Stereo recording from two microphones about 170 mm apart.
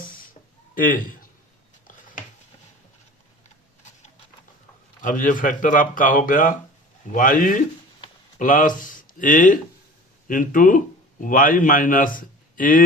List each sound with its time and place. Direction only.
0.8 s a man's voice: 55° left (ahead or behind)
5.0 s speech: 50° left (ahead or behind)